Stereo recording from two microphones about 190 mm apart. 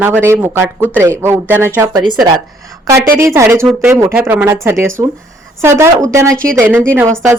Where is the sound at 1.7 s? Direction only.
25° right (ahead or behind).